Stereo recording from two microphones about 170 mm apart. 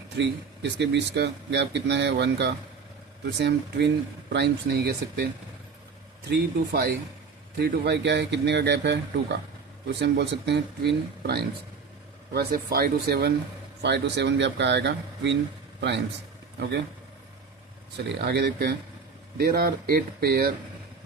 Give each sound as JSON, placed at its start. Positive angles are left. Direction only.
{"t": 0.2, "sound": "speech", "side_deg": -90}
{"t": 7.6, "sound": "speech", "side_deg": -85}
{"t": 12.3, "sound": "speech", "side_deg": -65}
{"t": 13.8, "sound": "speech", "side_deg": -85}
{"t": 17.9, "sound": "speech", "side_deg": -70}
{"t": 19.4, "sound": "speech", "side_deg": -60}